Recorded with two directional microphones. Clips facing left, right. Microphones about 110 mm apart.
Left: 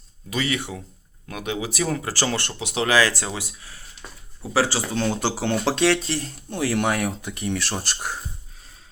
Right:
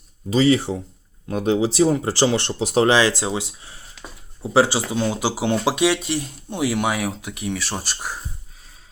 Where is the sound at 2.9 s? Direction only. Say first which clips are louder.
Right 3 dB; 20° right (ahead or behind); by 8.2 s centre (ahead or behind).